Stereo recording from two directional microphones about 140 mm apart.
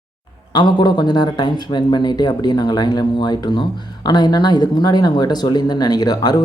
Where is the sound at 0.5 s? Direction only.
30° left (ahead or behind).